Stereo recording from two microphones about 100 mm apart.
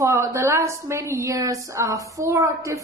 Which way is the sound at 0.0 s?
30° right (ahead or behind).